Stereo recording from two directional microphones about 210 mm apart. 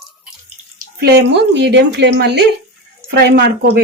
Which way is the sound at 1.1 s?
55° right (ahead or behind).